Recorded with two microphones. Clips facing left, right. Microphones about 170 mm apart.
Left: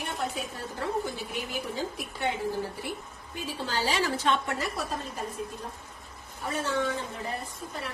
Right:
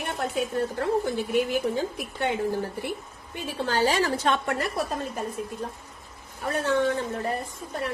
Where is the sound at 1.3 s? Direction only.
55° right (ahead or behind).